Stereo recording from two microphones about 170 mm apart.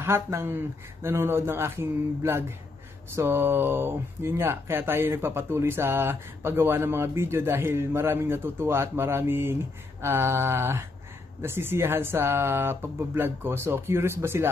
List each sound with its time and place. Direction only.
0.0 s speech: 15° right (ahead or behind)